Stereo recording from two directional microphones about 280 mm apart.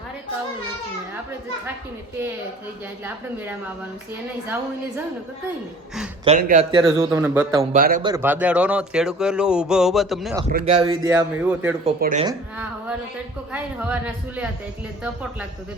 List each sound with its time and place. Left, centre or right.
6.2 s speech: right; by 7.6 s centre
7.6 s a man's voice: right
8.0 s speech: centre
10.7 s speech: centre
11.9 s speech: right
12.2 s a woman's voice: centre